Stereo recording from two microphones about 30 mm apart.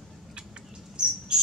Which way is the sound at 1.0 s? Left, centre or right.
Right.